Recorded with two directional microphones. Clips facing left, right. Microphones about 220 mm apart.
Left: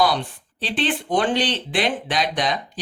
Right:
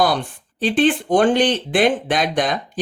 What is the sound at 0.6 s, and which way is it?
Speech, 50° right (ahead or behind).